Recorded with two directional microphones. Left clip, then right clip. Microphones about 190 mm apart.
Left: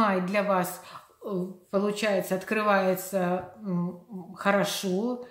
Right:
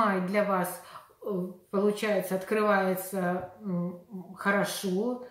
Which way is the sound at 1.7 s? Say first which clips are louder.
Left 1 dB; 35° left (ahead or behind).